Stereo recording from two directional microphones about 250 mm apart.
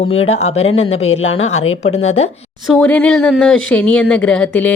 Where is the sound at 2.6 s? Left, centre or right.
Centre.